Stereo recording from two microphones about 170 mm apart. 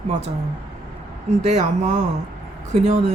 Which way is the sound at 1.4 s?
40° right (ahead or behind).